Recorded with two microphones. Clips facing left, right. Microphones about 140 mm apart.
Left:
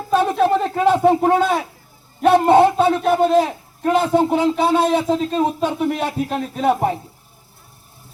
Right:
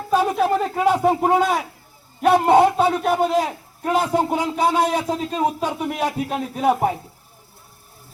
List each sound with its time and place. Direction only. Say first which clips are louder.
0.1 s a sound: left 2 dB; 5° right (ahead or behind)
1.2 s speech: left 2 dB; 10° right (ahead or behind)
2.2 s a sound: left 2 dB; 5° right (ahead or behind)
4.1 s speech: left 4 dB; 5° right (ahead or behind)
4.4 s speech: left 3 dB; 25° left (ahead or behind)
5.3 s speech: left 3 dB; 10° right (ahead or behind)